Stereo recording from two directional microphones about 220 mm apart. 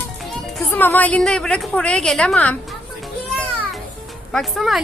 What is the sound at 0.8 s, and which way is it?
A woman's voice, 10° left (ahead or behind).